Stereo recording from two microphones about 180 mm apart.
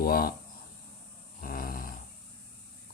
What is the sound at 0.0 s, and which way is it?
Speech, 55° left (ahead or behind).